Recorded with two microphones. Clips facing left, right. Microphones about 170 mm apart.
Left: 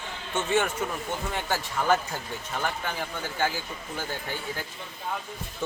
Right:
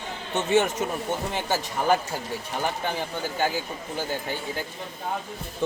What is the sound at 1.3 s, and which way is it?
Speech, 20° right (ahead or behind).